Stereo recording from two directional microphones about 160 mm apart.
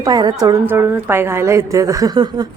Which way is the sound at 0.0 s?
25° right (ahead or behind).